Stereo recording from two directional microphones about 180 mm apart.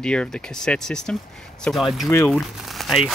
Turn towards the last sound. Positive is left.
turn(degrees=0)  # may be behind; listen again after turning